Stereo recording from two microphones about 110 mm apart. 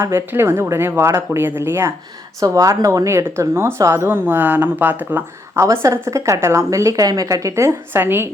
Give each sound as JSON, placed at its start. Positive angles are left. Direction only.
{"t": 0.0, "sound": "speech", "side_deg": -20}